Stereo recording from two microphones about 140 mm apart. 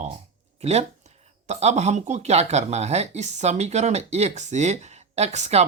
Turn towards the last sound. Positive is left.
turn(degrees=-55)  # may be behind; listen again after turning